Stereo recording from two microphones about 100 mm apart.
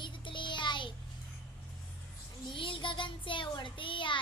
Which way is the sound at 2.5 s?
60° left (ahead or behind).